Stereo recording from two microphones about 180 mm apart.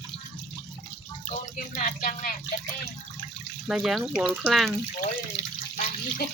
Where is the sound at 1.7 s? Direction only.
50° left (ahead or behind).